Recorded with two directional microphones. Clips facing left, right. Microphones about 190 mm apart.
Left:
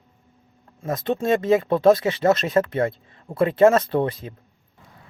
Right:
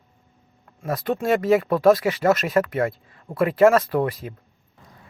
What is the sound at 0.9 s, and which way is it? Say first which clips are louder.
Speech: even; 20° left (ahead or behind).